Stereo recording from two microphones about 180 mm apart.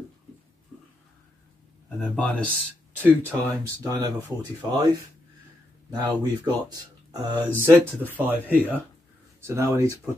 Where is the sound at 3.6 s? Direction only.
20° right (ahead or behind).